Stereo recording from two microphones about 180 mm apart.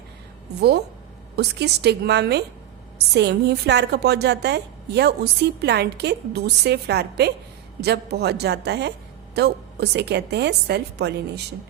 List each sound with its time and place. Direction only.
1.4 s a woman's voice: 65° right (ahead or behind)